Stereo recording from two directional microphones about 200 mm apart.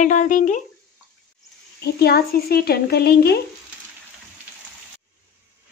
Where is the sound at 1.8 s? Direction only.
50° left (ahead or behind).